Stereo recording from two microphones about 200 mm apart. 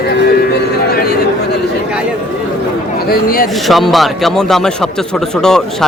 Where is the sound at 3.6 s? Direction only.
Centre (ahead or behind).